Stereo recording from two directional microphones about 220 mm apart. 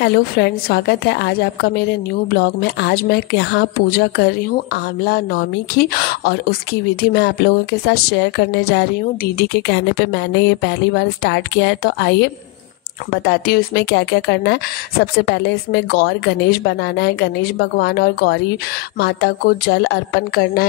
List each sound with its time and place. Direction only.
0.0 s a woman's voice: 45° left (ahead or behind)